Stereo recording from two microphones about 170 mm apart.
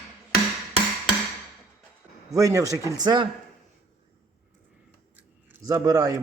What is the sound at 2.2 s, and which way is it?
A man's voice, 20° right (ahead or behind).